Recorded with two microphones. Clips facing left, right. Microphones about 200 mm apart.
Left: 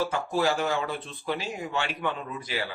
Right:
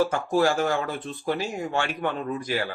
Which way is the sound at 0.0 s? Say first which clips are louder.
Right 4 dB; 45° right (ahead or behind).